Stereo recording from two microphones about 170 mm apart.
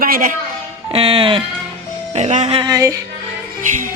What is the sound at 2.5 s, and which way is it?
Music, 20° right (ahead or behind).